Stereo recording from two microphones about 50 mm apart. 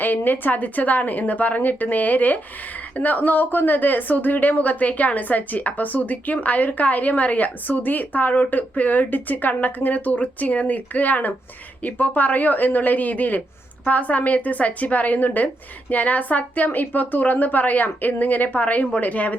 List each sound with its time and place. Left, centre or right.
0.0 s a woman's voice: left